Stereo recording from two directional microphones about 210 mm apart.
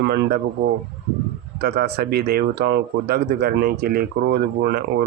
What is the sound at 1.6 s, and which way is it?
Speech, 45° right (ahead or behind).